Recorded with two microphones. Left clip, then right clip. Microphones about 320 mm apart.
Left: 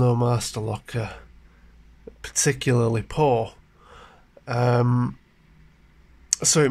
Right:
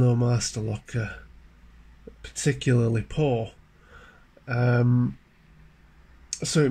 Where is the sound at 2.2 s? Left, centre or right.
Left.